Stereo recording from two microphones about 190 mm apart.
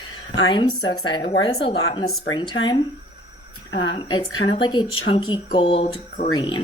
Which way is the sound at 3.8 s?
25° left (ahead or behind).